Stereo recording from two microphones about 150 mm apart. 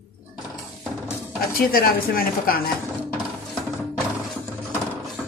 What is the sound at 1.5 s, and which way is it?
Speech, 80° left.